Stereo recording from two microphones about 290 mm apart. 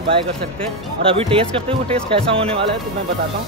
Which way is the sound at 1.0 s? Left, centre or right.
Centre.